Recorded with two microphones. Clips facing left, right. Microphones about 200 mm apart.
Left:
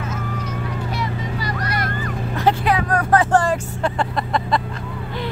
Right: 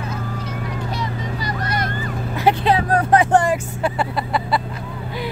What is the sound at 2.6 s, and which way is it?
Vehicle, 25° right (ahead or behind).